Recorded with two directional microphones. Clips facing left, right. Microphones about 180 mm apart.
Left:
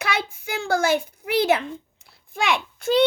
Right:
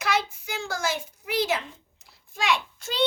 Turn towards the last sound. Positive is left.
turn(degrees=55)  # may be behind; listen again after turning